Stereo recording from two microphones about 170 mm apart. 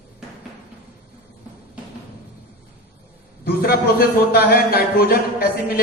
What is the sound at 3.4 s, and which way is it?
Speech, 60° left (ahead or behind).